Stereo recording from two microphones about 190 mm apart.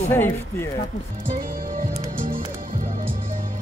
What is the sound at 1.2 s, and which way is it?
Music, 50° right (ahead or behind).